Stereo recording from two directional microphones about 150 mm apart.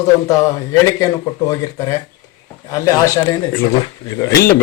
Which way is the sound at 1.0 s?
20° left (ahead or behind).